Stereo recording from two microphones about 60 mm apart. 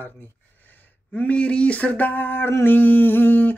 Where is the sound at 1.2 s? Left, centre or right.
Centre.